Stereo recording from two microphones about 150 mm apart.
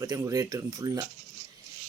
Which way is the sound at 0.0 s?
20° right (ahead or behind).